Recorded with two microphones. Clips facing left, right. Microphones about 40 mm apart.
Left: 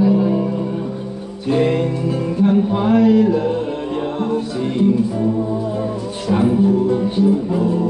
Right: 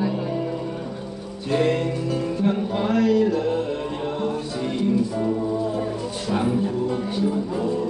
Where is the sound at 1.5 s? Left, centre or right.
Centre.